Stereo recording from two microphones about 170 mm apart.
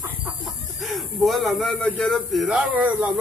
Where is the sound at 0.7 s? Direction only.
Centre (ahead or behind).